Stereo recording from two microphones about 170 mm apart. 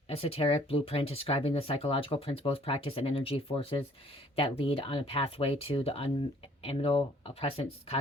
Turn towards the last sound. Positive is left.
turn(degrees=35)  # may be behind; listen again after turning